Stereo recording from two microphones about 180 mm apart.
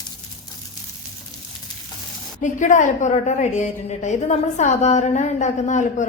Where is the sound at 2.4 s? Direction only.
45° left (ahead or behind).